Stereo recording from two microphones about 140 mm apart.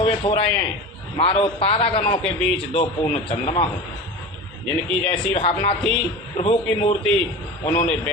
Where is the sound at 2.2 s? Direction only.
5° left (ahead or behind).